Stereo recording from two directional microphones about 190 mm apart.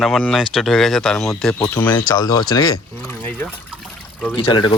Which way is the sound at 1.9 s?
20° left (ahead or behind).